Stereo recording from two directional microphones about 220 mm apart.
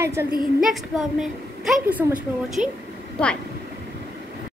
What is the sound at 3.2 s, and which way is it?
Speech, 5° left (ahead or behind).